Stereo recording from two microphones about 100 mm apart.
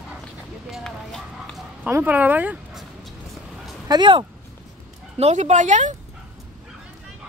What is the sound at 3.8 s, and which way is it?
Speech, 45° right (ahead or behind).